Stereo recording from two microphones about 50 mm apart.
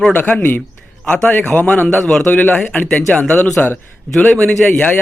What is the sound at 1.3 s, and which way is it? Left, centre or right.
A man's voice, left.